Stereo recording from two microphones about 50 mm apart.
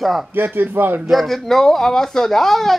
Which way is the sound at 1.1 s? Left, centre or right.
Centre.